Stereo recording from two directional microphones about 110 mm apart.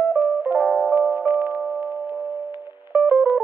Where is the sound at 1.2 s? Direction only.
20° right (ahead or behind).